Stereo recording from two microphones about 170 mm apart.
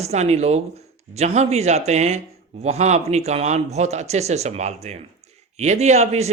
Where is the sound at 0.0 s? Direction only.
40° right (ahead or behind).